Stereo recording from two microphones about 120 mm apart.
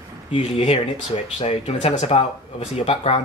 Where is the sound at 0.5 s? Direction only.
55° left (ahead or behind).